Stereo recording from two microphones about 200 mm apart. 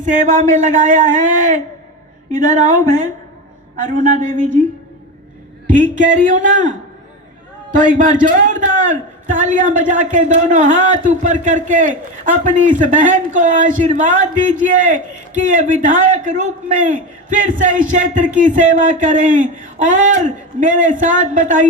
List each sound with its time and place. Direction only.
0.5 s a man's voice: 40° right (ahead or behind)
5.9 s a man's voice: 40° right (ahead or behind)
7.8 s a man's voice: 40° right (ahead or behind)